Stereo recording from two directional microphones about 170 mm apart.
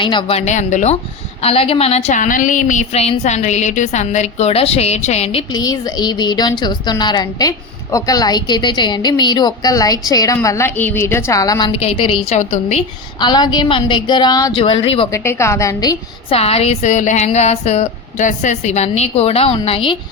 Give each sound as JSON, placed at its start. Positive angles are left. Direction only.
{"t": 0.0, "sound": "a woman's voice", "side_deg": 30}
{"t": 5.5, "sound": "a woman's voice", "side_deg": 20}
{"t": 11.7, "sound": "a woman's voice", "side_deg": 35}
{"t": 13.1, "sound": "a woman's voice", "side_deg": 25}
{"t": 15.1, "sound": "a woman's voice", "side_deg": 15}
{"t": 16.3, "sound": "a woman's voice", "side_deg": 35}